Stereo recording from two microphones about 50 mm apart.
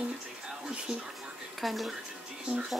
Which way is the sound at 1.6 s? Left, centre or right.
Centre.